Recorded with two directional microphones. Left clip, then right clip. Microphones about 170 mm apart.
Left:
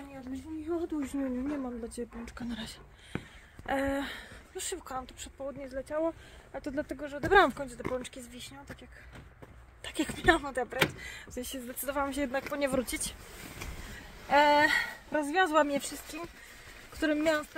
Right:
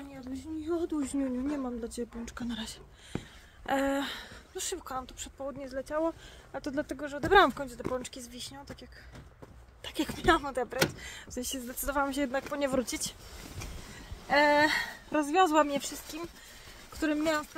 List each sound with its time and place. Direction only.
0.7 s speech: 5° right (ahead or behind)
8.3 s speech: 15° right (ahead or behind)
9.8 s speech: centre (ahead or behind); by 12.0 s 20° right (ahead or behind)
12.0 s speech: 10° right (ahead or behind)
14.3 s speech: centre (ahead or behind)